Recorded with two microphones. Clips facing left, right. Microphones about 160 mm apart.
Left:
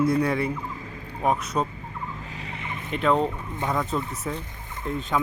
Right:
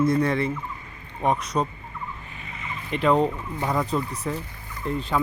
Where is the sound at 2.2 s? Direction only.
90° left; by 2.8 s 65° left (ahead or behind).